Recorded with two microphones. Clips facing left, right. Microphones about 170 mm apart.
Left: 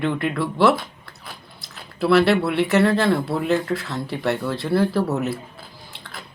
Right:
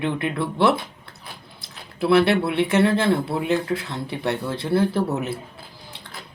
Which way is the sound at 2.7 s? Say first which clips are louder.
Left 1 dB; 25° right (ahead or behind).